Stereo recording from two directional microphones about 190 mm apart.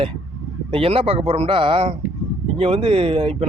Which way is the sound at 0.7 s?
30° right (ahead or behind).